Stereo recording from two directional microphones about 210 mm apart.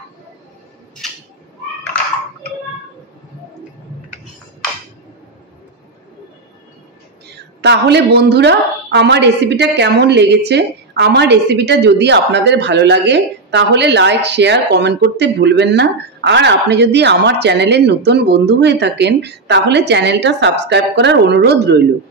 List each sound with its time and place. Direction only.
7.6 s a woman's voice: 55° right (ahead or behind)